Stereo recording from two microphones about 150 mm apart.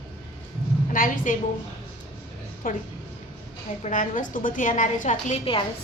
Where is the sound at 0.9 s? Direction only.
65° left (ahead or behind).